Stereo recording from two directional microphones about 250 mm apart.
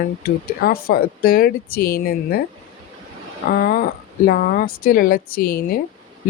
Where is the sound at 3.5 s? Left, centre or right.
Left.